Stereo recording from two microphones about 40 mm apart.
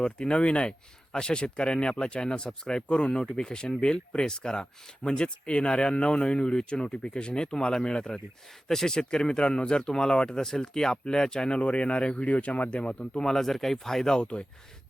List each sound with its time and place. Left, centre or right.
0.0 s speech: left
8.6 s speech: centre
13.2 s speech: centre